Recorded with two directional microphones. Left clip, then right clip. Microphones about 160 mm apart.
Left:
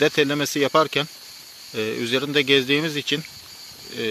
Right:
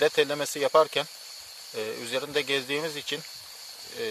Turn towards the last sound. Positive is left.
turn(degrees=-15)  # may be behind; listen again after turning